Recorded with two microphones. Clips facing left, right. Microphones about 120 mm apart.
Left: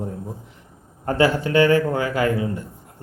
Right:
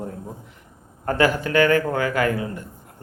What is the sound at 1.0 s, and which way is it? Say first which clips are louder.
Speech: left 1 dB; 25° left (ahead or behind).